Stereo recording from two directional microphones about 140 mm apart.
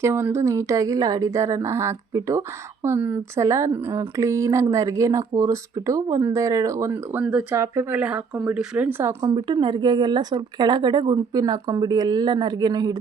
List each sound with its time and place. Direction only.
0.0 s speech: 20° right (ahead or behind)
9.2 s speech: 35° right (ahead or behind)